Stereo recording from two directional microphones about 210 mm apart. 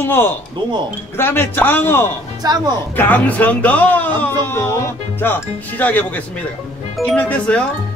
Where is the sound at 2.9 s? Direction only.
10° left (ahead or behind).